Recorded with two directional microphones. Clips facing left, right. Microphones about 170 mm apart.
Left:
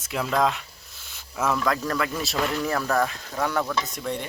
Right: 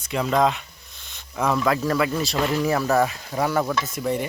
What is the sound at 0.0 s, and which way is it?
Speech, centre (ahead or behind).